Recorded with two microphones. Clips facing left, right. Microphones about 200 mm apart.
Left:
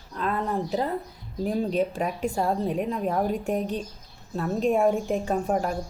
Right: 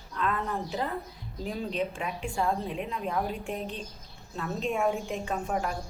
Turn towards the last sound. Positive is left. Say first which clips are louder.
# left 5 dB
turn(degrees=40)  # may be behind; listen again after turning